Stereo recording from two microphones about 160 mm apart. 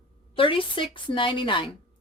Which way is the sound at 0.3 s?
35° left (ahead or behind).